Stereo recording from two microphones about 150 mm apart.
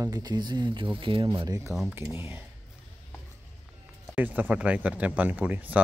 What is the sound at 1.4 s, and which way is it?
Speech, 25° right (ahead or behind).